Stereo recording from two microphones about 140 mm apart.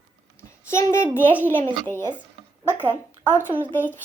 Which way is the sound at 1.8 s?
15° left (ahead or behind).